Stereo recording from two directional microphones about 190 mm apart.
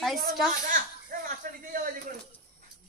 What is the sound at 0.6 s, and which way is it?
Speech, 45° right (ahead or behind).